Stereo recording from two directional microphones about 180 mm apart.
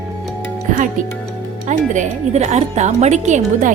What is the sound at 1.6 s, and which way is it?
Speech, 45° right (ahead or behind).